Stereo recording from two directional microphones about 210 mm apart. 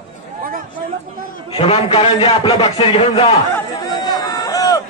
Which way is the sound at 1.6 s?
25° left (ahead or behind).